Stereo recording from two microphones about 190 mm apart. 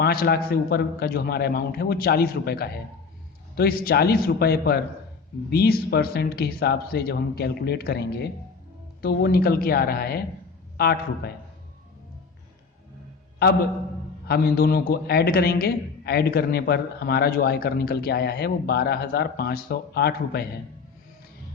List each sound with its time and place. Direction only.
0.0 s a man's voice: 55° left (ahead or behind)
14.3 s a man's voice: 55° left (ahead or behind)